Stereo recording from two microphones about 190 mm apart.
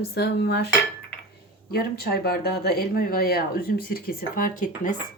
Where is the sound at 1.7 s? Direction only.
55° left (ahead or behind).